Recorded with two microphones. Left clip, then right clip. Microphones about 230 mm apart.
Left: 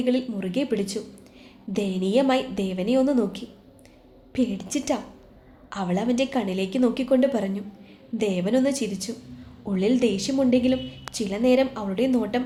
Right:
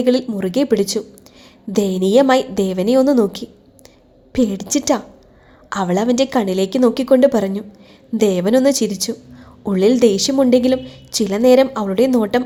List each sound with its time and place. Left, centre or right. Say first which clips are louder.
0.0 s a woman's voice: right 9 dB; right